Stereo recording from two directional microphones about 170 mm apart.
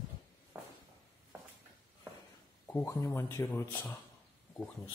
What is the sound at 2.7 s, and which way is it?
Speech, 15° left (ahead or behind).